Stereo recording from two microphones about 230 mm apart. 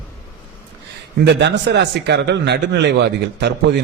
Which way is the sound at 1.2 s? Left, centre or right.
Right.